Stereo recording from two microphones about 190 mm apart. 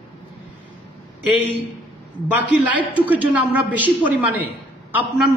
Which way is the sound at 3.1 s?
10° right (ahead or behind).